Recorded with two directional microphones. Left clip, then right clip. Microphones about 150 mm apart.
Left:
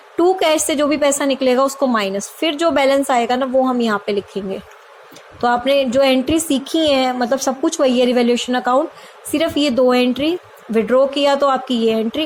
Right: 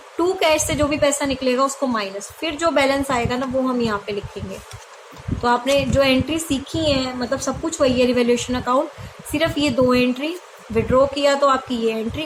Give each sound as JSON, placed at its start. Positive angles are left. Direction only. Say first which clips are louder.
{"t": 0.2, "sound": "a woman's voice", "louder": "left 3 dB", "side_deg": 40}
{"t": 5.4, "sound": "a woman's voice", "louder": "left 3 dB", "side_deg": 40}